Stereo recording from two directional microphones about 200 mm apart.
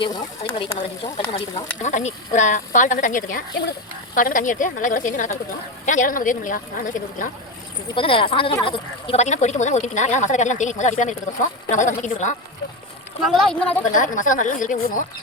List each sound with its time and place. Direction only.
1.0 s speech: 25° left (ahead or behind)
7.9 s speech: 25° left (ahead or behind)
13.2 s speech: centre (ahead or behind)
13.8 s speech: 40° left (ahead or behind)